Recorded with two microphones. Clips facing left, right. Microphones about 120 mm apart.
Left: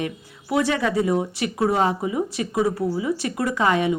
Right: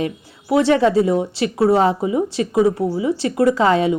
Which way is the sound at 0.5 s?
25° right (ahead or behind).